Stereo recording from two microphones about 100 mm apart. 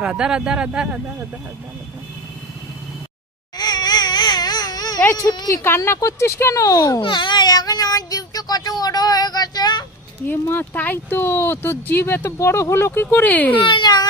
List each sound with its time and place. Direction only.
0.0 s speech: 10° right (ahead or behind)
3.5 s baby cry: 45° left (ahead or behind)
5.1 s a woman's voice: 40° left (ahead or behind)
5.6 s speech: 25° left (ahead or behind)
7.0 s child singing: 50° left (ahead or behind)
10.4 s speech: 20° left (ahead or behind)
13.6 s speech: 50° left (ahead or behind)